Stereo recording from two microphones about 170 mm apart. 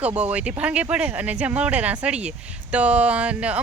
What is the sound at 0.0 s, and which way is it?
A woman's voice, 10° right (ahead or behind).